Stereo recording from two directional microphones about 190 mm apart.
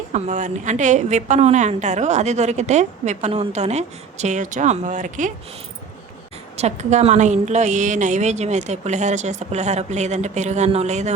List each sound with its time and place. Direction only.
0.1 s a woman's voice: 40° right (ahead or behind)
6.6 s a woman's voice: 35° right (ahead or behind)